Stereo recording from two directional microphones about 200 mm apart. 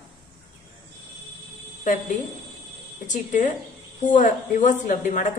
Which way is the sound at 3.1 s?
40° left (ahead or behind).